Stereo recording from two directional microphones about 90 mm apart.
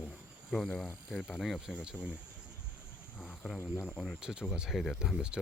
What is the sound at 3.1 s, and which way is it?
Speech, 20° left (ahead or behind).